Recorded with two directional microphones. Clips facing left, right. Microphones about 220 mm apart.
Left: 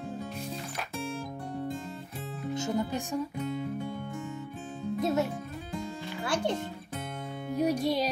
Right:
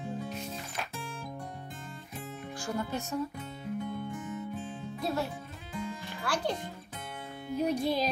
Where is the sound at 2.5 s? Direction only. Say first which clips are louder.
Left 4 dB; 20° left (ahead or behind).